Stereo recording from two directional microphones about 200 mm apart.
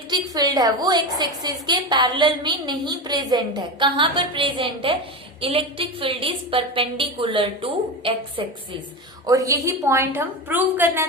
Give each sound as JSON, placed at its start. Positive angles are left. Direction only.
{"t": 0.1, "sound": "a woman's voice", "side_deg": -20}
{"t": 9.2, "sound": "a woman's voice", "side_deg": -15}